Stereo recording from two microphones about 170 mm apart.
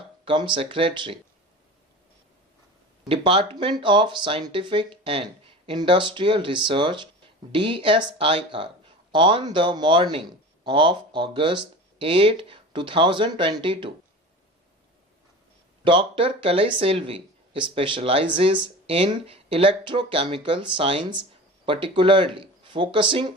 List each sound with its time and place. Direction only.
0.3 s speech: 30° right (ahead or behind)
3.0 s speech: 30° right (ahead or behind)
15.8 s speech: 30° right (ahead or behind)